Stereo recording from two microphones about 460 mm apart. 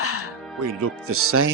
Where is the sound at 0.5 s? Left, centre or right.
Right.